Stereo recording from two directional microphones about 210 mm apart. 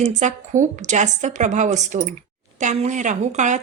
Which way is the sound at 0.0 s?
35° right (ahead or behind).